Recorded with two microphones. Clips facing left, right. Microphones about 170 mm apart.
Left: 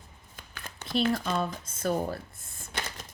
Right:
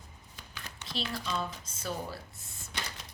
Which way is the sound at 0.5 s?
55° left (ahead or behind).